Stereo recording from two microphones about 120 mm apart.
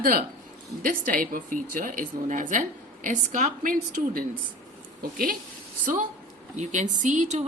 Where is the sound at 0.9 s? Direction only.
90° right.